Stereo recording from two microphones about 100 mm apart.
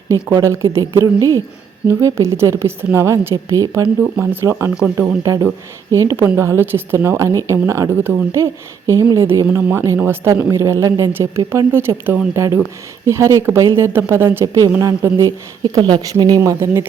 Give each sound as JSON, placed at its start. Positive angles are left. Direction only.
{"t": 0.4, "sound": "a woman's voice", "side_deg": -30}
{"t": 4.2, "sound": "a woman's voice", "side_deg": -25}
{"t": 14.4, "sound": "a woman's voice", "side_deg": -35}
{"t": 15.6, "sound": "speech", "side_deg": -50}
{"t": 16.4, "sound": "a woman's voice", "side_deg": -30}